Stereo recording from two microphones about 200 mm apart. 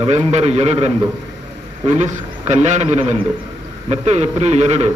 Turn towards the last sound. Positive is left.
turn(degrees=-35)  # may be behind; listen again after turning